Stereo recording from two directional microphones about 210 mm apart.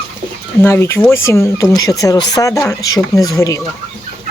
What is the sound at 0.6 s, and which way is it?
Speech, 10° left (ahead or behind).